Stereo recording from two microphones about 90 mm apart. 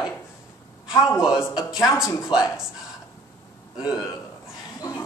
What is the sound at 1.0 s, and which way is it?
Speech, 30° left (ahead or behind).